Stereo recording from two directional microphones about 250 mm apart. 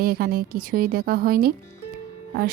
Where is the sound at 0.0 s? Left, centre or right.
Right.